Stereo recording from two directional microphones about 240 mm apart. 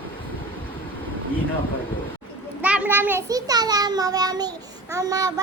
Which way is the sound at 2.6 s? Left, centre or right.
Centre.